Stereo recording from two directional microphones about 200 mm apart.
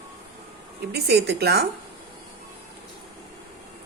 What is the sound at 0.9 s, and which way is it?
Speech, 55° right (ahead or behind).